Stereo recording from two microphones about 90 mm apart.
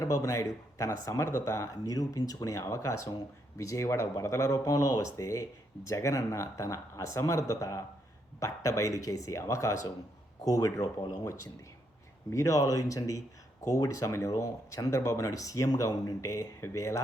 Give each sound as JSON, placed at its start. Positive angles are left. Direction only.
{"t": 0.0, "sound": "speech", "side_deg": 40}
{"t": 1.7, "sound": "speech", "side_deg": 45}
{"t": 12.3, "sound": "speech", "side_deg": 35}